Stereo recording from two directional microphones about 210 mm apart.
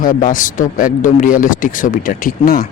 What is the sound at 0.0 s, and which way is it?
Speech, 40° left (ahead or behind).